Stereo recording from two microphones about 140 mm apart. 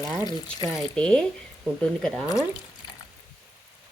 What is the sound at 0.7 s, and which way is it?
A woman's voice, 5° left (ahead or behind).